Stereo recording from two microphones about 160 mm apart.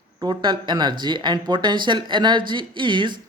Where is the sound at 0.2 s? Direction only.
30° right (ahead or behind).